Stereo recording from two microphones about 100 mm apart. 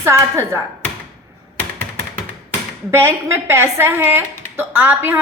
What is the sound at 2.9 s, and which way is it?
Speech, 25° right (ahead or behind).